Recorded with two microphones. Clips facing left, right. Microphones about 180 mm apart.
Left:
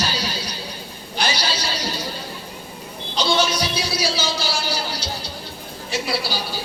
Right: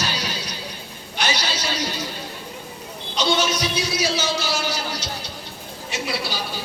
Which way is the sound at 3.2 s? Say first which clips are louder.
Left 1 dB; 30° left (ahead or behind).